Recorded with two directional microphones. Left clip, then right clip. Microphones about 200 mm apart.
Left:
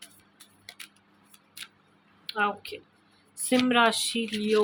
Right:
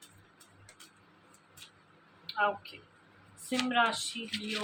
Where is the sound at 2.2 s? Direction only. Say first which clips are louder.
Left 3 dB; 55° left (ahead or behind).